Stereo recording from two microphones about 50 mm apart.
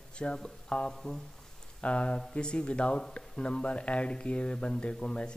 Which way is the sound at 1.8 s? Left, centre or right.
Left.